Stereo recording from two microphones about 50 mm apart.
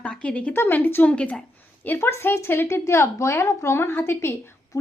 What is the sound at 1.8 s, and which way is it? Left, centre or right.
A woman's voice, left.